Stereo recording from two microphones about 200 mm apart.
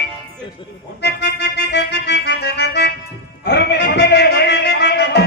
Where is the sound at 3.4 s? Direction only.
55° left (ahead or behind).